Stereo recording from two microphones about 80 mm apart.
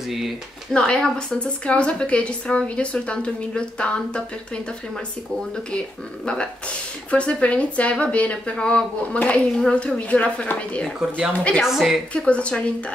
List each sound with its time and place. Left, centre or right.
0.7 s a woman's voice: centre
5.7 s a woman's voice: centre
11.0 s speech: centre
11.3 s a woman's voice: centre
11.6 s a woman's voice: centre
12.1 s a woman's voice: centre